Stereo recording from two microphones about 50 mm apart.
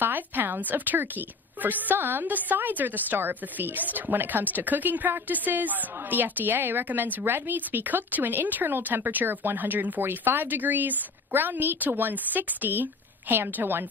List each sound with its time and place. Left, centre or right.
0.0 s a woman's voice: right